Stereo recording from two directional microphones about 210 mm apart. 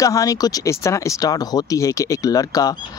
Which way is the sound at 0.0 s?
15° left (ahead or behind).